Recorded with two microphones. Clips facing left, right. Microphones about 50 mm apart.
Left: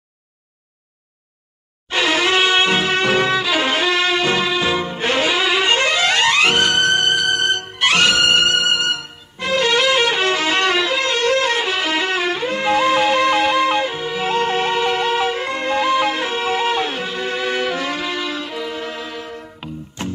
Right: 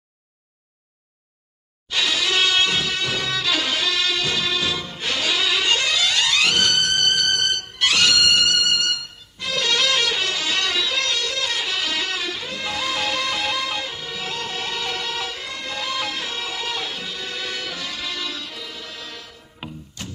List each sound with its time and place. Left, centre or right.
1.9 s music: left
3.3 s music: left
19.6 s music: centre